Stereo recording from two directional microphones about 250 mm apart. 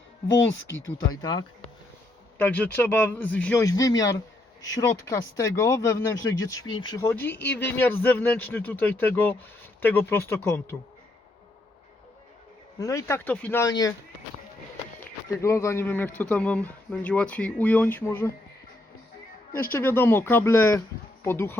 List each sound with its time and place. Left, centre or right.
1.1 s speech: centre
12.8 s speech: centre
15.0 s speech: centre
19.7 s speech: centre